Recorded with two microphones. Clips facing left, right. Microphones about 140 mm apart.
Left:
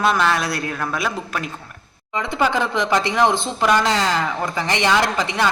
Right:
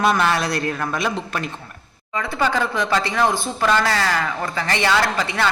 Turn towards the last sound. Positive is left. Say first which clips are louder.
# left 1 dB
turn(degrees=15)  # may be behind; listen again after turning